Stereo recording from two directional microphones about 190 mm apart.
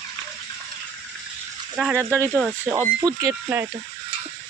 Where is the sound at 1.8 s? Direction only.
10° right (ahead or behind).